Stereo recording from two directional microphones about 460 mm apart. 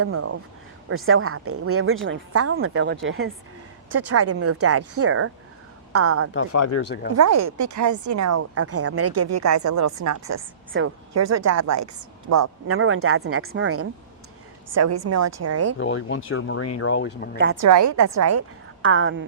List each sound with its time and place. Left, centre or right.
0.0 s a woman's voice: right
6.3 s speech: left
7.2 s speech: right
15.8 s speech: left
17.3 s a woman's voice: right
17.6 s speech: right